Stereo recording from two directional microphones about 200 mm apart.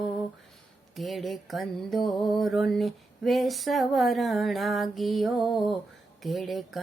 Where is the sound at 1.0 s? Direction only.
Centre (ahead or behind).